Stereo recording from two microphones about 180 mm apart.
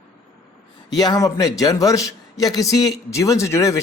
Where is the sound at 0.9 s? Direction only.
20° left (ahead or behind).